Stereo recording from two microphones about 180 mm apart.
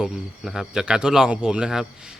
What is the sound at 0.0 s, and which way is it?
Speech, centre (ahead or behind).